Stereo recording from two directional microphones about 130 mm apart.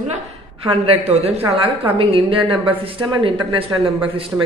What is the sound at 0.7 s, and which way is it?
A man's voice, 50° right (ahead or behind).